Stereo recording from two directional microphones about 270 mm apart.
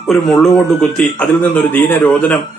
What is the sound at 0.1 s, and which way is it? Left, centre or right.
A man's voice, centre.